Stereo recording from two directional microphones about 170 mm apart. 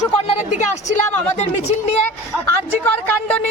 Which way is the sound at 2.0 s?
10° left (ahead or behind).